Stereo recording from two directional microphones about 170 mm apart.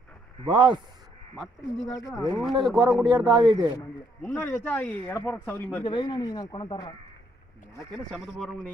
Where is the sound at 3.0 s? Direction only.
25° right (ahead or behind).